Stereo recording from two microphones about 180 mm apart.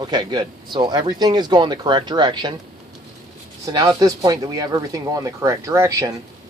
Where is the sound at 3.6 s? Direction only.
20° right (ahead or behind).